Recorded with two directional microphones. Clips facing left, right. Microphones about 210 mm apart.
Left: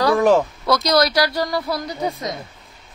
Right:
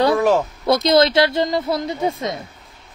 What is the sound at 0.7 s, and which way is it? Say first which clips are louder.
Speech: right 4 dB; 25° right (ahead or behind).